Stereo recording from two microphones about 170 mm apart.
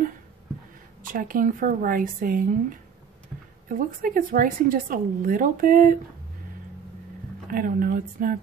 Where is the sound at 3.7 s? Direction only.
55° right (ahead or behind).